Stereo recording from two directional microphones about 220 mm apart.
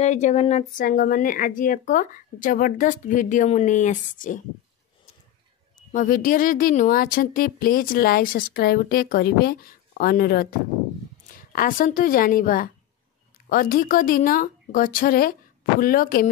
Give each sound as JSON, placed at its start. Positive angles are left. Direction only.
{"t": 0.0, "sound": "speech", "side_deg": 30}
{"t": 5.8, "sound": "speech", "side_deg": 35}